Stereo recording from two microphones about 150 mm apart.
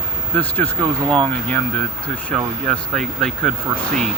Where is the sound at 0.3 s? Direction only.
10° left (ahead or behind).